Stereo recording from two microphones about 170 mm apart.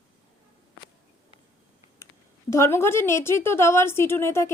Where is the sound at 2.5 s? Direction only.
15° left (ahead or behind).